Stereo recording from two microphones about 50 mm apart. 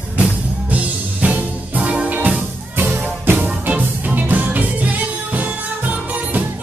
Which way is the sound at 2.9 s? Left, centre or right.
Right.